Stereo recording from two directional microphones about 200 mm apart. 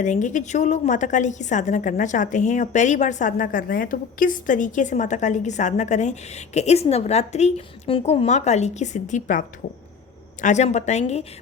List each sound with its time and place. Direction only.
0.0 s a woman's voice: 40° left (ahead or behind)
10.4 s a woman's voice: 35° left (ahead or behind)